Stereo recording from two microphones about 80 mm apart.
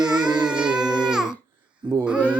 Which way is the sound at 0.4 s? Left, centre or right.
Centre.